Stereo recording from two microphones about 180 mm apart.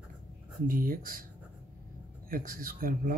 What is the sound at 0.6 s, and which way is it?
Speech, 50° right (ahead or behind).